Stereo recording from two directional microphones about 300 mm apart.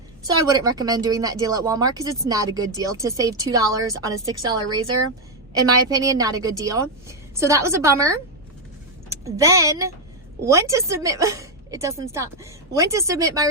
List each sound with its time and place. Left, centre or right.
0.3 s speech: centre